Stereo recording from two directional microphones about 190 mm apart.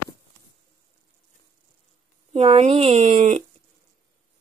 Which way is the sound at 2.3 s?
35° right (ahead or behind).